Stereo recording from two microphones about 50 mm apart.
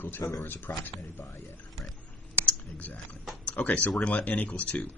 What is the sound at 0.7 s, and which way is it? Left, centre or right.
Speech, left.